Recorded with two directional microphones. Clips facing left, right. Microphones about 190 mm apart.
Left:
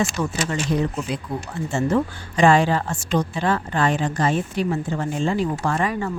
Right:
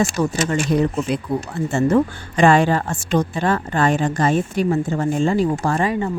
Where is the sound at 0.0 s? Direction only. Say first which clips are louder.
Right 4 dB; 45° right (ahead or behind).